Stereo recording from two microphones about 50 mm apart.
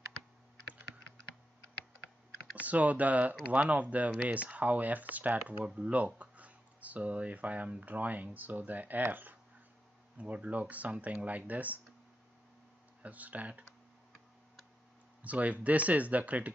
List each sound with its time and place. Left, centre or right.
2.6 s speech: right
10.1 s speech: right
13.0 s speech: right
15.2 s speech: right